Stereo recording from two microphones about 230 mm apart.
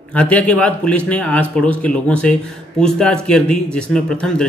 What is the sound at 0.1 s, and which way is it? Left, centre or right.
A man's voice, centre.